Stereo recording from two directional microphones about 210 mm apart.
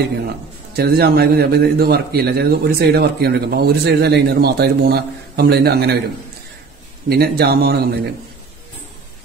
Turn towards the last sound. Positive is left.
turn(degrees=-50)  # may be behind; listen again after turning